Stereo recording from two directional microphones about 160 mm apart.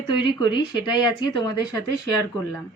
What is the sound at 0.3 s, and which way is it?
Speech, 30° left (ahead or behind).